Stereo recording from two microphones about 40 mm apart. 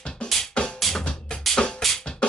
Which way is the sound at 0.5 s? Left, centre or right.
Left.